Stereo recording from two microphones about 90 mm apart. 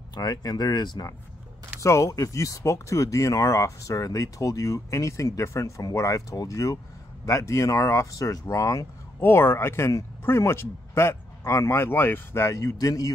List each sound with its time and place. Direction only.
0.1 s speech: 45° left (ahead or behind)
1.8 s speech: 35° left (ahead or behind)
12.5 s speech: 40° left (ahead or behind)